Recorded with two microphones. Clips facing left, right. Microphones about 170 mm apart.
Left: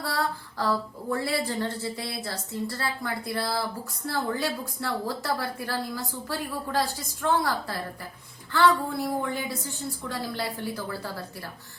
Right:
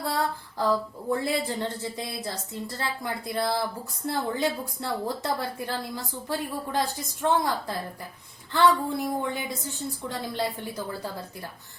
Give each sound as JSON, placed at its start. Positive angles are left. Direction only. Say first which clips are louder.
{"t": 0.0, "sound": "female singing", "louder": "right 1 dB", "side_deg": -20}
{"t": 1.1, "sound": "a woman's voice", "louder": "right 1 dB", "side_deg": -20}